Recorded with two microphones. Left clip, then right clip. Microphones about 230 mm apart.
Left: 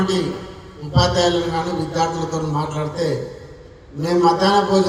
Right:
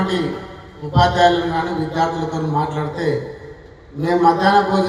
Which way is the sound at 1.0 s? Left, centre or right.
Left.